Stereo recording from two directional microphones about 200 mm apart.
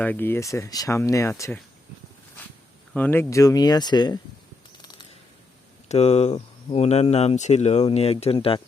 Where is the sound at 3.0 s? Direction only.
10° left (ahead or behind).